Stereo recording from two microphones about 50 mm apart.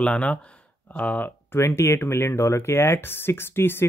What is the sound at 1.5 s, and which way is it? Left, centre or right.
Speech, left.